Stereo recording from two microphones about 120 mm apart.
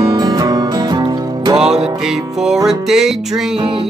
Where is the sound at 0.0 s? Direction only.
40° right (ahead or behind).